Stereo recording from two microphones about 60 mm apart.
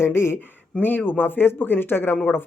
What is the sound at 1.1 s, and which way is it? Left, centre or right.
Speech, left.